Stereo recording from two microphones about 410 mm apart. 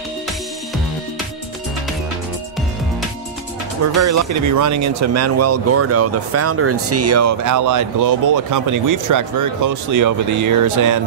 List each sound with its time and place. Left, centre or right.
3.8 s speech: right